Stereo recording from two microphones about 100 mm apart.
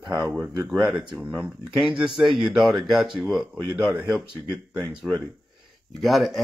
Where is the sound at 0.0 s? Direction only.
50° right (ahead or behind).